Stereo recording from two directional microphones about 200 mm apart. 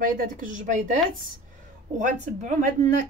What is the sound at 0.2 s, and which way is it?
Speech, 40° right (ahead or behind).